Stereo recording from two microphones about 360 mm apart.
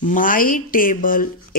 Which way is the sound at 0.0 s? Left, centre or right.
Left.